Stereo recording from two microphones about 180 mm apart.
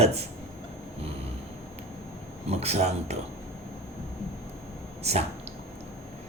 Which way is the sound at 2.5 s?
35° right (ahead or behind).